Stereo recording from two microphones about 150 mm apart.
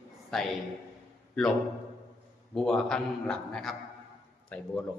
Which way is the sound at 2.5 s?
5° left (ahead or behind).